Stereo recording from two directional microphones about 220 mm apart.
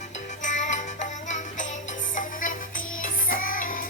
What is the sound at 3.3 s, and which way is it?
Music, 40° left (ahead or behind).